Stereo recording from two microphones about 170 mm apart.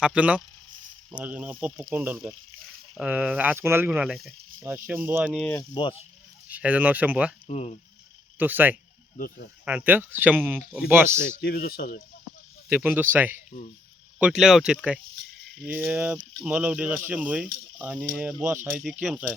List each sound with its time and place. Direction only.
0.0 s speech: 5° right (ahead or behind)
4.7 s speech: 15° right (ahead or behind)
5.4 s speech: 10° left (ahead or behind)
5.7 s speech: 30° left (ahead or behind)
6.5 s speech: 10° right (ahead or behind)
7.4 s speech: 40° left (ahead or behind)
8.4 s speech: 10° right (ahead or behind)
11.3 s speech: 60° left (ahead or behind)
12.6 s speech: 10° right (ahead or behind)